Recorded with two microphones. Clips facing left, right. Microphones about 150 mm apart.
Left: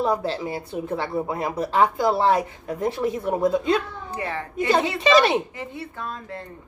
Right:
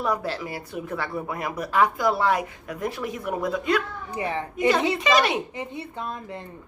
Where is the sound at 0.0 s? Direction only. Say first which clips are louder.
Left 3 dB; 25° left (ahead or behind).